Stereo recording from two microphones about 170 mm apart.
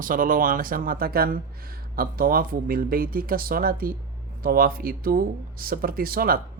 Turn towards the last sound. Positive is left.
turn(degrees=-60)  # may be behind; listen again after turning